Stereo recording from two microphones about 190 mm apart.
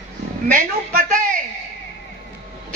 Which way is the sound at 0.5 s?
45° right (ahead or behind).